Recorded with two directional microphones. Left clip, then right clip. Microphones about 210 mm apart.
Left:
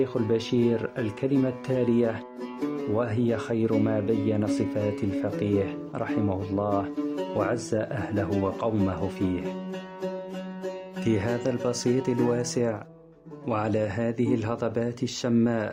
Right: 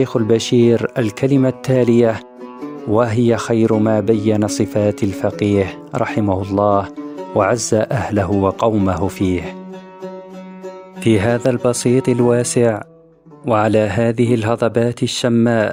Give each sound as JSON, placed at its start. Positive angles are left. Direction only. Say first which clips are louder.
{"t": 0.0, "sound": "speech", "louder": "right 10 dB", "side_deg": -50}
{"t": 11.0, "sound": "speech", "louder": "right 12 dB", "side_deg": -45}